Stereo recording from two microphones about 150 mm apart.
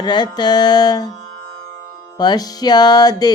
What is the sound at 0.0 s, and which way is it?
Music, 30° left (ahead or behind).